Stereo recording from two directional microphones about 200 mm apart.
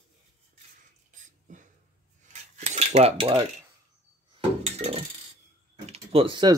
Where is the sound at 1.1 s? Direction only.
40° right (ahead or behind).